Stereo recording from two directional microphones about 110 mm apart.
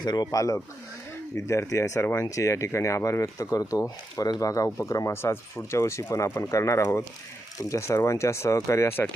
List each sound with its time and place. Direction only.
0.0 s speech: 40° left (ahead or behind); by 9.0 s 25° left (ahead or behind)